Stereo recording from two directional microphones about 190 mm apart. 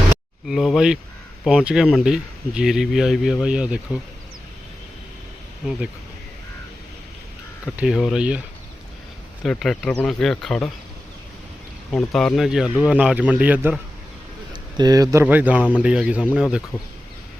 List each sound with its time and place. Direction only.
0.4 s speech: centre (ahead or behind)
7.8 s speech: centre (ahead or behind)
9.4 s speech: centre (ahead or behind)
11.9 s speech: 5° left (ahead or behind)
14.5 s speech: 20° right (ahead or behind); by 16.6 s 5° right (ahead or behind)